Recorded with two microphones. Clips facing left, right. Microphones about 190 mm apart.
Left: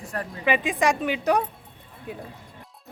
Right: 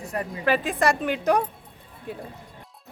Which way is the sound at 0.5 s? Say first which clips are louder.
Left 1 dB; 10° left (ahead or behind).